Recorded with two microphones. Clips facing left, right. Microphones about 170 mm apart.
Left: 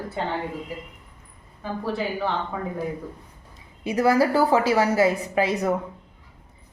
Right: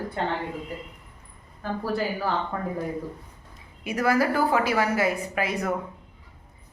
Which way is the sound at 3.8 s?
25° left (ahead or behind).